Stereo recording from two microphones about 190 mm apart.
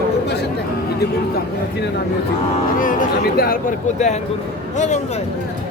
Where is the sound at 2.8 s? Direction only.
50° left (ahead or behind).